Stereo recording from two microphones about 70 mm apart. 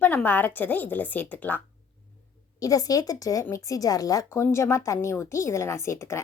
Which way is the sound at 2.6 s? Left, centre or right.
Left.